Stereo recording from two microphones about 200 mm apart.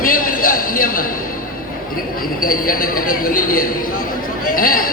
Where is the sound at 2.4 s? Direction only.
45° left (ahead or behind).